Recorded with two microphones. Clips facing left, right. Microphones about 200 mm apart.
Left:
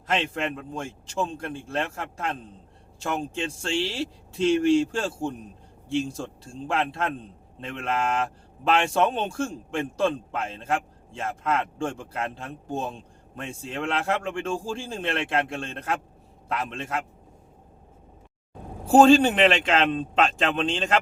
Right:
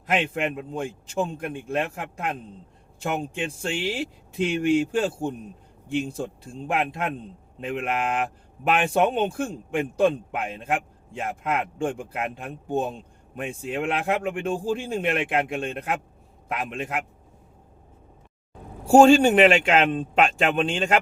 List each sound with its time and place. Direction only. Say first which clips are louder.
0.1 s speech: right 2 dB; 15° right (ahead or behind)
18.9 s speech: right 2 dB; 10° right (ahead or behind)